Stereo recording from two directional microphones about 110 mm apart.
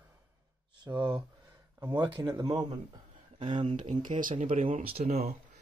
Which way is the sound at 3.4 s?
50° right (ahead or behind).